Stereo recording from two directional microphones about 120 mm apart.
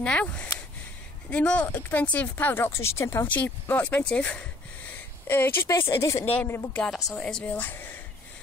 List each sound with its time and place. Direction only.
0.0 s speech: 10° left (ahead or behind)
7.1 s speech: 5° left (ahead or behind)